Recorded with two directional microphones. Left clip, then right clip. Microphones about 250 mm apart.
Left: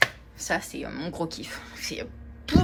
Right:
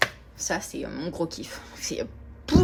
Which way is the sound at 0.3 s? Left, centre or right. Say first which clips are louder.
Left 1 dB; centre.